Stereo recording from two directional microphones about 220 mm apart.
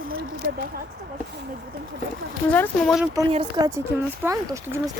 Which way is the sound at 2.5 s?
5° left (ahead or behind).